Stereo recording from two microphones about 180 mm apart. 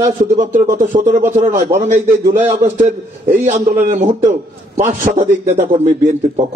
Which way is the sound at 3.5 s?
40° right (ahead or behind).